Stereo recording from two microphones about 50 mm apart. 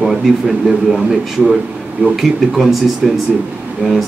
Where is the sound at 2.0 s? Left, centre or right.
Right.